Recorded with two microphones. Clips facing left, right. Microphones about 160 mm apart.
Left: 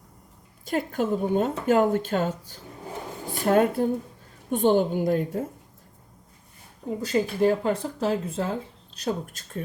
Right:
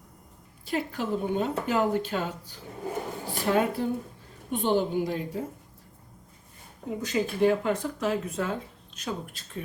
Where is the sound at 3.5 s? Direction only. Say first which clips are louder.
Left 5 dB; 50° left (ahead or behind).